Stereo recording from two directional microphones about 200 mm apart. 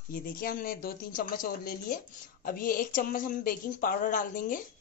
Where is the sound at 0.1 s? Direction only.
45° left (ahead or behind).